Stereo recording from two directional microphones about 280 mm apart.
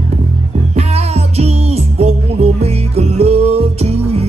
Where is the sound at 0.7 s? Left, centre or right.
Right.